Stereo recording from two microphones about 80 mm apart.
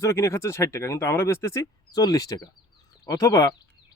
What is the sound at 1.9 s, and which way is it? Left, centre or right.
Speech, left.